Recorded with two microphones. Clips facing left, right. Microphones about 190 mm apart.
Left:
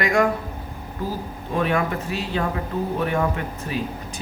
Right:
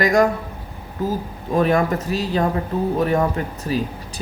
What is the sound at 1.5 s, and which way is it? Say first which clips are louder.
Speech: right 5 dB; 40° right (ahead or behind).